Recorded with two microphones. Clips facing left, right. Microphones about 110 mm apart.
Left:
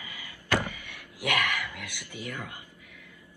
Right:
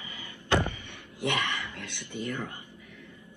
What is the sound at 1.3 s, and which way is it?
Speech, 20° right (ahead or behind).